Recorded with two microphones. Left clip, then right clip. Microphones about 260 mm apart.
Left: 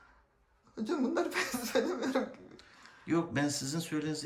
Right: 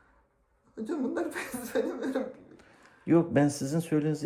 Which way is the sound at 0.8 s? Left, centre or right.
Left.